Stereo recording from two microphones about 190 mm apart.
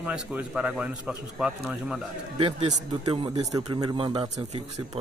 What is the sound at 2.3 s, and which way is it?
Speech, 30° right (ahead or behind).